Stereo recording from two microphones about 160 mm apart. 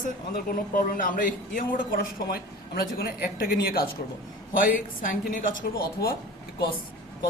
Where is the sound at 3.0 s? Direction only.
75° left (ahead or behind).